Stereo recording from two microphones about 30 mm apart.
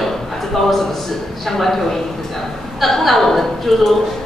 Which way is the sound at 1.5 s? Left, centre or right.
Centre.